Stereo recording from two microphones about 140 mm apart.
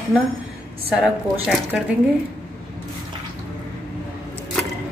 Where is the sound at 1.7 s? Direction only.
5° right (ahead or behind).